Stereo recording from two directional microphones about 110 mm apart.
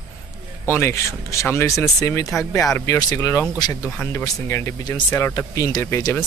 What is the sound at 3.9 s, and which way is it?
Speech, 20° left (ahead or behind).